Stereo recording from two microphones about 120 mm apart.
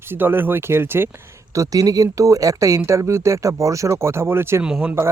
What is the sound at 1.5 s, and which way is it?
Speech, 30° right (ahead or behind).